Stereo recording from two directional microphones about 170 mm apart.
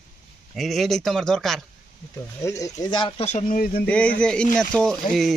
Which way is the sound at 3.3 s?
50° left (ahead or behind).